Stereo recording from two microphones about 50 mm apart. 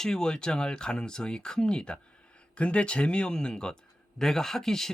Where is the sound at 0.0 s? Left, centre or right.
Centre.